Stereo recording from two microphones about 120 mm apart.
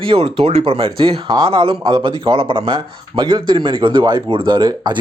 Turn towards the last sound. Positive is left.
turn(degrees=-35)  # may be behind; listen again after turning